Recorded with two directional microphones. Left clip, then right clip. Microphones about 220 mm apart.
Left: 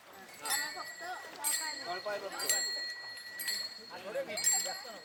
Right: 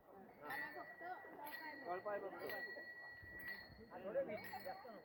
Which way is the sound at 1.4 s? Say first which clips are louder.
Left 17 dB; 75° left (ahead or behind).